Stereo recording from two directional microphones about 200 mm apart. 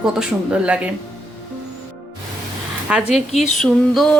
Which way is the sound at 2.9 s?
5° right (ahead or behind).